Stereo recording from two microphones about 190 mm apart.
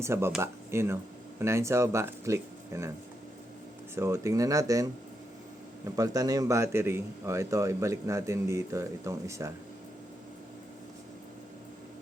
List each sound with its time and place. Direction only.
0.0 s a man's voice: 15° right (ahead or behind)
3.9 s a man's voice: 15° right (ahead or behind)